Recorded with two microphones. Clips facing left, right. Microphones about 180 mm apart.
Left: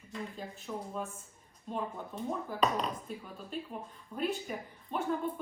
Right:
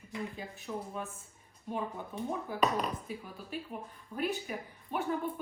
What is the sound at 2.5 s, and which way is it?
Speech, 5° right (ahead or behind).